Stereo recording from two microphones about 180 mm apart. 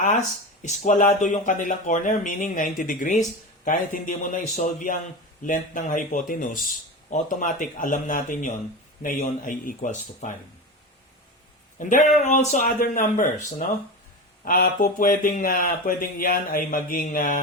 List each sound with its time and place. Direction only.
0.0 s speech: 40° left (ahead or behind)
11.8 s speech: 45° left (ahead or behind)